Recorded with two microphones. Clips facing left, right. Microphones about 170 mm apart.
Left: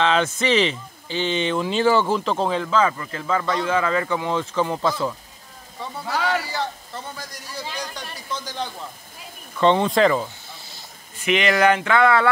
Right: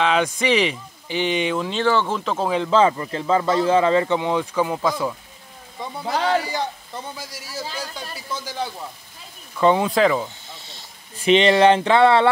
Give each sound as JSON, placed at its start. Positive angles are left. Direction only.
{"t": 0.0, "sound": "a man's voice", "side_deg": -10}
{"t": 1.6, "sound": "speech", "side_deg": 5}
{"t": 2.7, "sound": "speech", "side_deg": -25}
{"t": 6.1, "sound": "a sound", "side_deg": -30}
{"t": 6.4, "sound": "a man's voice", "side_deg": -15}
{"t": 11.2, "sound": "speech", "side_deg": -30}